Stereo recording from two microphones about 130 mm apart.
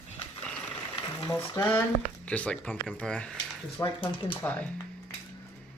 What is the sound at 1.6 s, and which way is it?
Speech, 15° left (ahead or behind).